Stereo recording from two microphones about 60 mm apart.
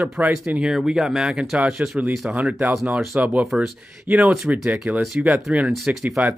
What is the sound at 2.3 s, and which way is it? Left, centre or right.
Speech, right.